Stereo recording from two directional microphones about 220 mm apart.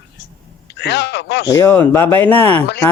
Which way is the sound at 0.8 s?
50° left (ahead or behind).